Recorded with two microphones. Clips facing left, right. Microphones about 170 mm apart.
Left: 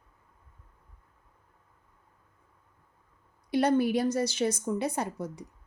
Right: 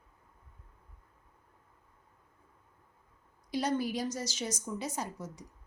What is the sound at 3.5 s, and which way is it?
A woman's voice, 60° left (ahead or behind).